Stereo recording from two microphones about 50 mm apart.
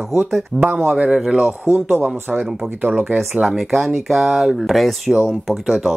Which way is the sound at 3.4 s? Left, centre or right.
Centre.